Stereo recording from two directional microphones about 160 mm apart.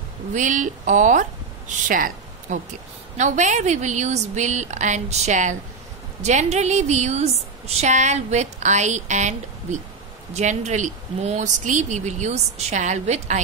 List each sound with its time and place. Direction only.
0.3 s a woman's voice: 50° right (ahead or behind)